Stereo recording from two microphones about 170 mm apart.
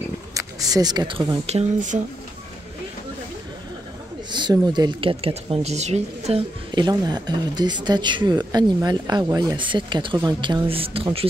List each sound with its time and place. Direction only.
0.3 s speech: 20° right (ahead or behind)
1.4 s speech: 40° right (ahead or behind)
4.3 s speech: 25° right (ahead or behind)
6.7 s speech: 25° right (ahead or behind)